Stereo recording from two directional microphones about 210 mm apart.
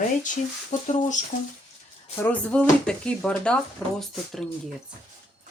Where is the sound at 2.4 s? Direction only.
5° left (ahead or behind).